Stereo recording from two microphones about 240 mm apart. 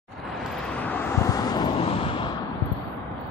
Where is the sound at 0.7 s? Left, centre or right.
Centre.